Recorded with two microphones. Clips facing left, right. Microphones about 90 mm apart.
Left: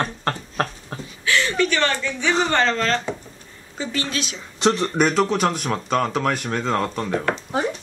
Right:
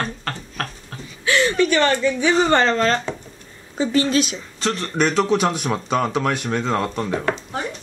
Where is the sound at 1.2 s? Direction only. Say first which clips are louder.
Right 3 dB; 20° right (ahead or behind).